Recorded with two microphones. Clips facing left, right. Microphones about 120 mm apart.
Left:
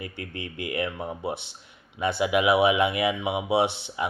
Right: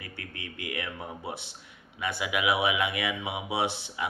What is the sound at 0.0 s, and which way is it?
Speech, 30° left (ahead or behind).